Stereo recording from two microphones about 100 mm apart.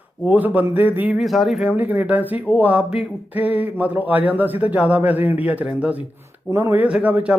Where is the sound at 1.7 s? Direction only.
15° right (ahead or behind).